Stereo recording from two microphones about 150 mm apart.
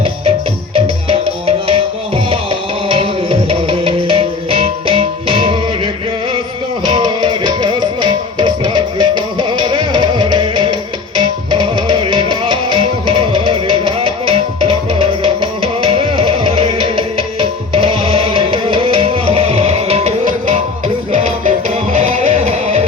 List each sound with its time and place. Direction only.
0.0 s music: 35° right (ahead or behind)
20.2 s music: 55° right (ahead or behind)
21.9 s music: 60° right (ahead or behind)